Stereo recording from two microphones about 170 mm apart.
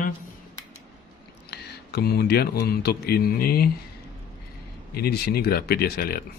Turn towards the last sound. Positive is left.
turn(degrees=65)  # may be behind; listen again after turning